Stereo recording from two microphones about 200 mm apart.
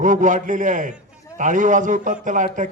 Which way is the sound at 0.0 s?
40° right (ahead or behind).